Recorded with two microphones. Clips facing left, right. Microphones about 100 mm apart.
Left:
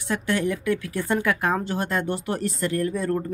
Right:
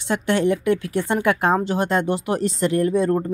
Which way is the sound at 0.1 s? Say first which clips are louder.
Right 5 dB; 25° right (ahead or behind).